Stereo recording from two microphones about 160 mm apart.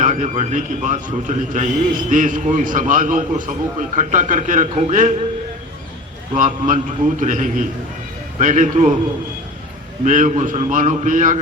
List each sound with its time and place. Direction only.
0.0 s a man's voice: 50° right (ahead or behind)
6.3 s a man's voice: 50° right (ahead or behind)
10.0 s a man's voice: 50° right (ahead or behind)